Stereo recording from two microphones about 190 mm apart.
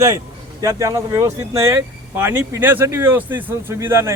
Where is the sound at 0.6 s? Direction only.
15° right (ahead or behind).